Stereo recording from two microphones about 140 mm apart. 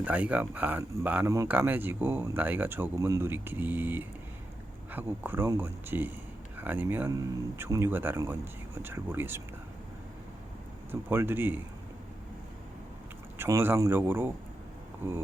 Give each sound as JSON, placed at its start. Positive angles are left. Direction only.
{"t": 0.0, "sound": "speech", "side_deg": -10}
{"t": 7.1, "sound": "speech", "side_deg": -25}
{"t": 11.1, "sound": "speech", "side_deg": -15}
{"t": 13.4, "sound": "speech", "side_deg": -15}